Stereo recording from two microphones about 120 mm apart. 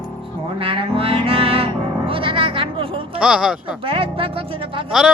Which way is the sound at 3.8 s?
50° right (ahead or behind).